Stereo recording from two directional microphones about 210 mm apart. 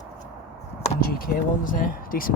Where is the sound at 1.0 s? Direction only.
45° left (ahead or behind).